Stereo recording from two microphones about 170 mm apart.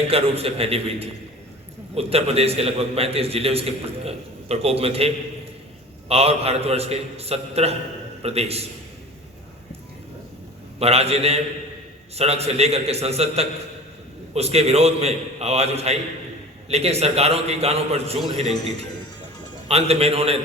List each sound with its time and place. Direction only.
0.1 s a man's voice: 35° right (ahead or behind)
10.8 s a man's voice: 35° right (ahead or behind)
19.6 s a man's voice: 35° right (ahead or behind)